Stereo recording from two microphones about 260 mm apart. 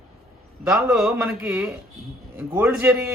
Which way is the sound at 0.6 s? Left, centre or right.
Centre.